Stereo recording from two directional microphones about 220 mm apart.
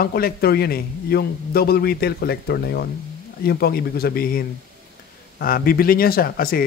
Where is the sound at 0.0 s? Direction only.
45° left (ahead or behind).